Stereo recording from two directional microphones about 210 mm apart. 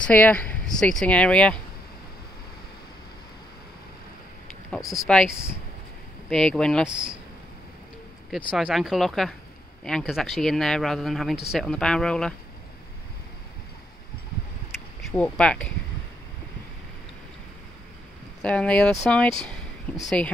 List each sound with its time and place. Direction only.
0.0 s speech: 5° left (ahead or behind)
4.9 s speech: centre (ahead or behind)
6.2 s speech: centre (ahead or behind)
8.3 s speech: 5° right (ahead or behind)
15.0 s speech: 5° left (ahead or behind)
18.4 s speech: 5° left (ahead or behind)